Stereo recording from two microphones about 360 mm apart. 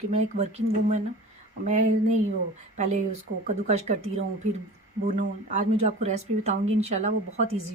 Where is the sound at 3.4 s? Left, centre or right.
Centre.